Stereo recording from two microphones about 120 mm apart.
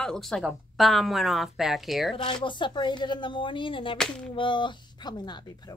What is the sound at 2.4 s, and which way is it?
Speech, 40° left (ahead or behind).